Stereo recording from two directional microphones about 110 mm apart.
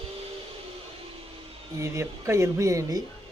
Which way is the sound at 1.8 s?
25° right (ahead or behind).